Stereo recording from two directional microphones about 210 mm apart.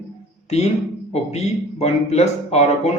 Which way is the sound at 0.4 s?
30° left (ahead or behind).